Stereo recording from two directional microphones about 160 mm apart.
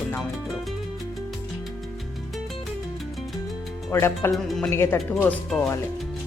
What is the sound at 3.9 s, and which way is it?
Speech, 15° left (ahead or behind).